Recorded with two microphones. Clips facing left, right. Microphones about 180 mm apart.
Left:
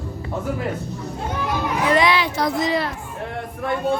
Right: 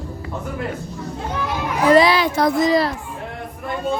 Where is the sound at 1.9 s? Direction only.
35° right (ahead or behind).